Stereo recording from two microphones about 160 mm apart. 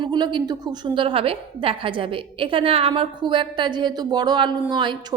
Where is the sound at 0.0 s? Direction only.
30° right (ahead or behind).